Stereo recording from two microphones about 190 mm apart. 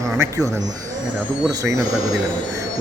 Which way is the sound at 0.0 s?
15° right (ahead or behind).